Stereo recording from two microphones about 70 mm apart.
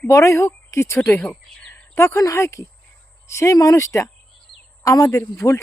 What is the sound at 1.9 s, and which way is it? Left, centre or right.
Speech, left.